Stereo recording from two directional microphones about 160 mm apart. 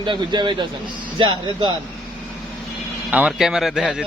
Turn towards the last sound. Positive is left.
turn(degrees=-5)  # may be behind; listen again after turning